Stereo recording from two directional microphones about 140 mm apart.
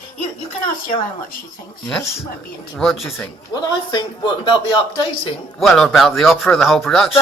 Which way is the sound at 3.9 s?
30° left (ahead or behind).